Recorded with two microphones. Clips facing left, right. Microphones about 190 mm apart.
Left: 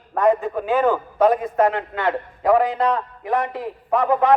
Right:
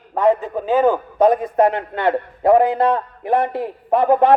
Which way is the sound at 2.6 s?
55° right (ahead or behind).